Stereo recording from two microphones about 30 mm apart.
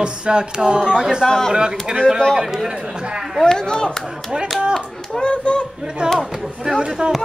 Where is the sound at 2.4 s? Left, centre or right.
Centre.